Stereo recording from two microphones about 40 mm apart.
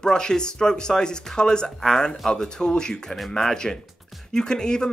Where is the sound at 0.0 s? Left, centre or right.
Centre.